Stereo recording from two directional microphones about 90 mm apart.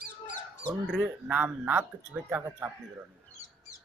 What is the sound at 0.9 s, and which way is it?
A man's voice, 10° right (ahead or behind).